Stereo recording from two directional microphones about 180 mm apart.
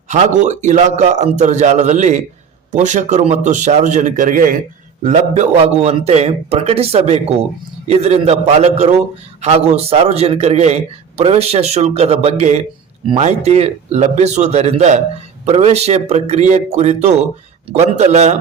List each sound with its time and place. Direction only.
0.1 s a man's voice: 40° right (ahead or behind)